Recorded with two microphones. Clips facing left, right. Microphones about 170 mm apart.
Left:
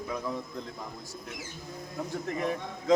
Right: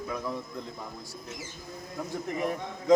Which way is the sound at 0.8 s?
10° right (ahead or behind).